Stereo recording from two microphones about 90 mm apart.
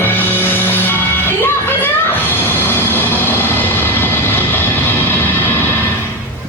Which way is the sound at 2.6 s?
25° left (ahead or behind).